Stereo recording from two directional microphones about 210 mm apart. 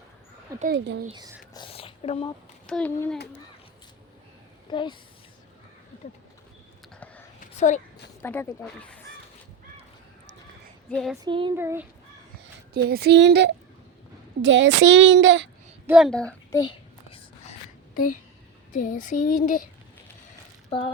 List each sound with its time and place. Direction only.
0.5 s speech: 15° right (ahead or behind)
1.5 s speech: 25° left (ahead or behind)
2.6 s speech: 5° left (ahead or behind)
4.7 s speech: 20° left (ahead or behind)
7.5 s a sound: 35° left (ahead or behind)
8.2 s speech: 10° left (ahead or behind)
10.9 s speech: centre (ahead or behind)
11.2 s speech: 20° right (ahead or behind)
11.5 s speech: 10° right (ahead or behind)
12.7 s speech: 50° right (ahead or behind)
15.9 s speech: centre (ahead or behind)
18.7 s speech: 40° left (ahead or behind)
20.7 s a sound: 25° left (ahead or behind)